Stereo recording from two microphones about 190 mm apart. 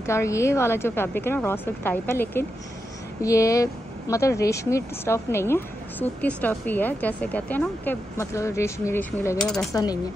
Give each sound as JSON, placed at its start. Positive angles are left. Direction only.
{"t": 0.0, "sound": "speech", "side_deg": 15}
{"t": 9.4, "sound": "speech", "side_deg": 0}
{"t": 9.7, "sound": "speech", "side_deg": 20}